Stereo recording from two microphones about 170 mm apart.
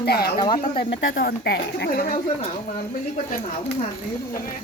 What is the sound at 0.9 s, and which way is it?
Speech, 80° left.